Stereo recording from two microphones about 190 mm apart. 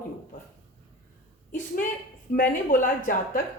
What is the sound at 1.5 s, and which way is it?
A woman's voice, 45° left (ahead or behind).